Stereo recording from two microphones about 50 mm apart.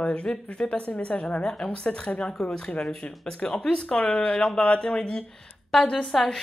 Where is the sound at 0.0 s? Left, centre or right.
Left.